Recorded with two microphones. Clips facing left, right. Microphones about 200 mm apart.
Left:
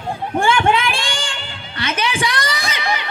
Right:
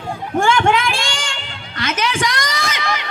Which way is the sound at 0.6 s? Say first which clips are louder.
Even; 30° left (ahead or behind).